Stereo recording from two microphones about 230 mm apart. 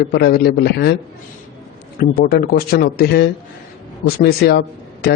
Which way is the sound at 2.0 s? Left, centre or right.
Left.